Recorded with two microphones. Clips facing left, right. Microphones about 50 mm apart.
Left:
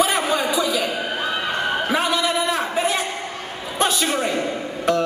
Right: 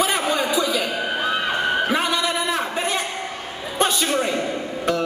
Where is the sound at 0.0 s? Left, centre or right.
Centre.